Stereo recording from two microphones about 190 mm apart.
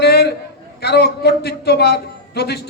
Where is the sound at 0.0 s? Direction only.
60° left (ahead or behind).